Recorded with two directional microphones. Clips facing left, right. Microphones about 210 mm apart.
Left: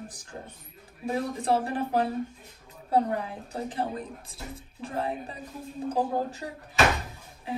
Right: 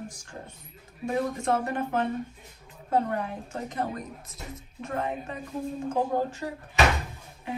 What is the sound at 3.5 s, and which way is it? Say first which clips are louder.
Speech: left 4 dB; 30° left (ahead or behind).